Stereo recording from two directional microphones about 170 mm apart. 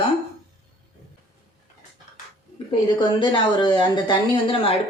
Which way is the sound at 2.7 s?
30° left (ahead or behind).